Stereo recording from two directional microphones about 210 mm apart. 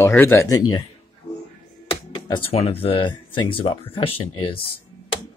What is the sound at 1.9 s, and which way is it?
Speech, 25° left (ahead or behind).